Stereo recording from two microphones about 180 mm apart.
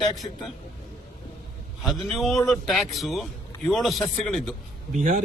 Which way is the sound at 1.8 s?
Centre (ahead or behind).